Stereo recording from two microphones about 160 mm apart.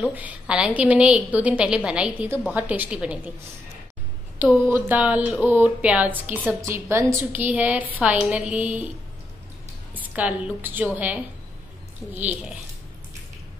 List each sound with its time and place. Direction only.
0.1 s speech: 10° right (ahead or behind)
4.4 s speech: 10° right (ahead or behind)
9.9 s a woman's voice: 10° right (ahead or behind)
12.1 s speech: 45° right (ahead or behind)